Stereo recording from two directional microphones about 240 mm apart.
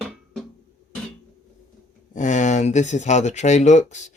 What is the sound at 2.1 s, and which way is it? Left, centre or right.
Speech, left.